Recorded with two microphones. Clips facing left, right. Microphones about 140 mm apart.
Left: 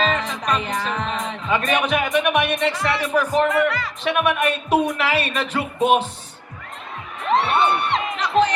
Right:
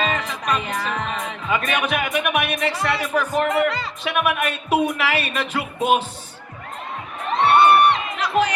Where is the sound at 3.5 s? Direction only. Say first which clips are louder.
Even; 25° right (ahead or behind).